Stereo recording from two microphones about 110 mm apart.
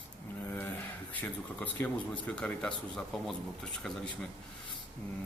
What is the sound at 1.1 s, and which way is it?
Speech, 15° left (ahead or behind).